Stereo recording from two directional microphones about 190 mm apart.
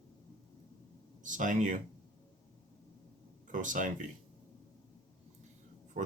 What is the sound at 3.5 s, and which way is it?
Speech, 45° right (ahead or behind).